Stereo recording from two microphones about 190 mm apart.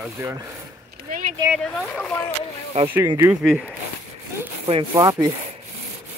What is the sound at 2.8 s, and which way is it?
Speech, 10° right (ahead or behind).